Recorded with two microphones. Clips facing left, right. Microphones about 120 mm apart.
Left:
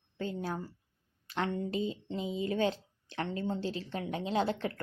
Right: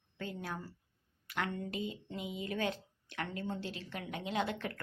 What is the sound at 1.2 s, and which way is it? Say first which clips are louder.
A woman's voice: left 5 dB; 25° left (ahead or behind).